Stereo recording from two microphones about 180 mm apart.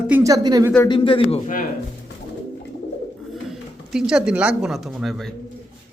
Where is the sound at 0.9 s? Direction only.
30° left (ahead or behind).